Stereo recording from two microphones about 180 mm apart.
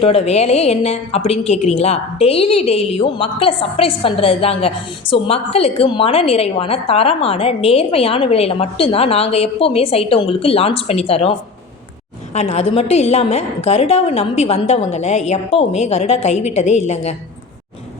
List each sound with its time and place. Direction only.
0.0 s a woman's voice: 35° left (ahead or behind)